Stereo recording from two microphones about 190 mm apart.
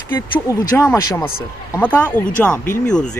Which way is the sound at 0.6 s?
20° left (ahead or behind).